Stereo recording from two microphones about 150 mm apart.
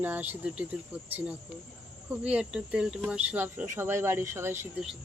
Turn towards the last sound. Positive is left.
turn(degrees=-15)  # may be behind; listen again after turning